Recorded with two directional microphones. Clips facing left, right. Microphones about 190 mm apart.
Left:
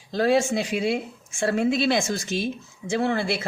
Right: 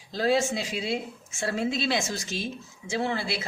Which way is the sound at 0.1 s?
55° left (ahead or behind).